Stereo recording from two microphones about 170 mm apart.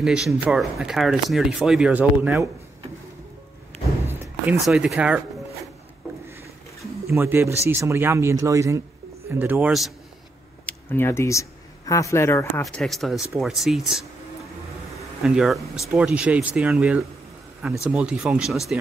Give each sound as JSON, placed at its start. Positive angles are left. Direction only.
{"t": 0.0, "sound": "speech", "side_deg": -5}
{"t": 4.1, "sound": "a sound", "side_deg": -15}
{"t": 4.6, "sound": "speech", "side_deg": 0}
{"t": 7.1, "sound": "speech", "side_deg": -15}
{"t": 10.6, "sound": "speech", "side_deg": 10}
{"t": 12.6, "sound": "speech", "side_deg": 0}
{"t": 15.2, "sound": "speech", "side_deg": -5}